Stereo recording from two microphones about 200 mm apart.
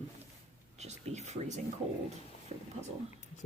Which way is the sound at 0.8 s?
35° right (ahead or behind).